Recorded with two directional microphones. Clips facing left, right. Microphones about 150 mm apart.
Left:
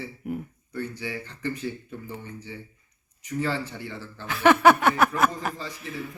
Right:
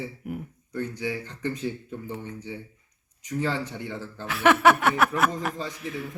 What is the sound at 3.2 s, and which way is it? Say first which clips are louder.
Speech: even; 15° right (ahead or behind).